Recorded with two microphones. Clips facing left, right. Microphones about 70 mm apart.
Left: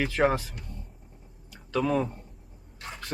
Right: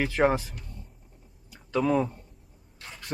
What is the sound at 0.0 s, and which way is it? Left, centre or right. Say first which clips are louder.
Speech: right 1 dB; centre.